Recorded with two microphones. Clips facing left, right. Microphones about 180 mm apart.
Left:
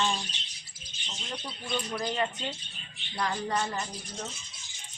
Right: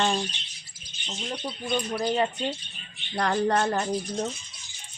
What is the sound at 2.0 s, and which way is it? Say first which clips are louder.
Speech: right 6 dB; 30° right (ahead or behind).